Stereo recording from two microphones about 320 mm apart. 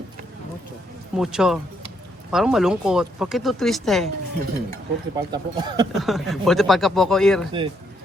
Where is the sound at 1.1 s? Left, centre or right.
Centre.